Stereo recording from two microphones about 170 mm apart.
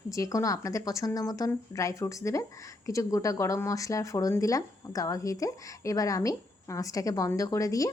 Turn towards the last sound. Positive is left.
turn(degrees=20)  # may be behind; listen again after turning